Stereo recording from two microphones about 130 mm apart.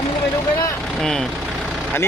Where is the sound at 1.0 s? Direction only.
5° left (ahead or behind).